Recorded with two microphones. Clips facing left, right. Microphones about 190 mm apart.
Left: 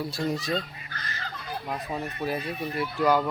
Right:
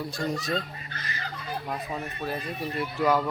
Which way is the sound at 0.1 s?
45° right (ahead or behind).